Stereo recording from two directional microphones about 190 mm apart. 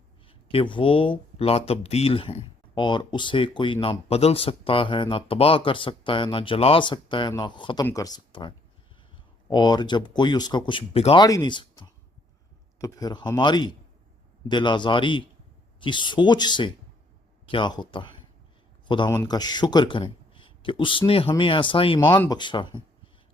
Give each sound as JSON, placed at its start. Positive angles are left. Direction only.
{"t": 0.3, "sound": "speech", "side_deg": 30}
{"t": 22.0, "sound": "speech", "side_deg": 15}